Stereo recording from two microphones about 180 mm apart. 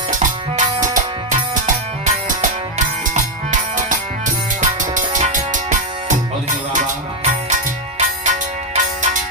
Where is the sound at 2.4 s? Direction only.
45° right (ahead or behind).